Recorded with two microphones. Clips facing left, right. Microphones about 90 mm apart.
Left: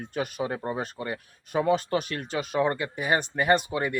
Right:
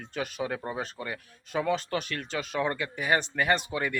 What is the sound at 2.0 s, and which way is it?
Speech, 45° left (ahead or behind).